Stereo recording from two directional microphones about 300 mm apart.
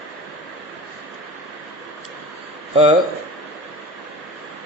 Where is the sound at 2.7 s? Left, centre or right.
Centre.